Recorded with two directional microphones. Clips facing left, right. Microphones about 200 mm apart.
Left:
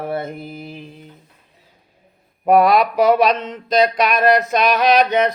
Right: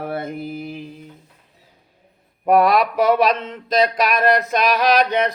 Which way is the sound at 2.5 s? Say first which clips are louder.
Left 2 dB; centre (ahead or behind).